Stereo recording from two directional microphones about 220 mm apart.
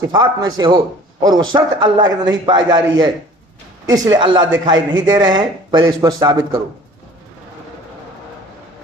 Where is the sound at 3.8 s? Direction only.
15° right (ahead or behind).